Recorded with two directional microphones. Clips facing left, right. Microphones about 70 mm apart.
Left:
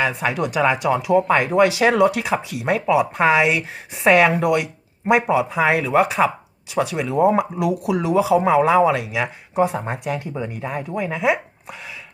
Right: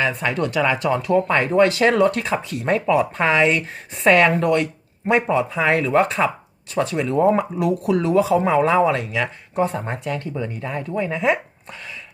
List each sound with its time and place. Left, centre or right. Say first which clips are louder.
0.0 s speech: even; centre